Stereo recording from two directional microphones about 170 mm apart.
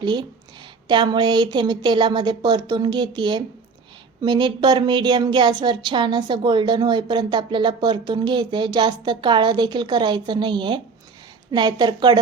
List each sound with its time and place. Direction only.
0.0 s speech: 25° right (ahead or behind)